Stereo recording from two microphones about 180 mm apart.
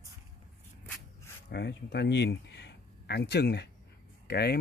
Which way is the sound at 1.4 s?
65° left (ahead or behind).